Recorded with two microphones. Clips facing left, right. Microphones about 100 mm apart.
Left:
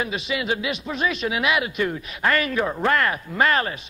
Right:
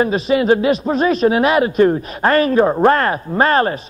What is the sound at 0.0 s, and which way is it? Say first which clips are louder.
A man's voice: right 11 dB; 40° right (ahead or behind).